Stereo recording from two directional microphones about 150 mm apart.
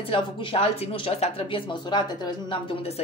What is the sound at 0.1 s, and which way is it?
Speech, 40° left (ahead or behind).